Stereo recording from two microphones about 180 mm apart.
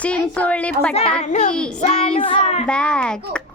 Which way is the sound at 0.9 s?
35° left (ahead or behind).